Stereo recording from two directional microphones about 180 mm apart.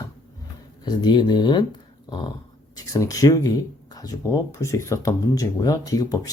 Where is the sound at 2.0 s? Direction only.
25° left (ahead or behind).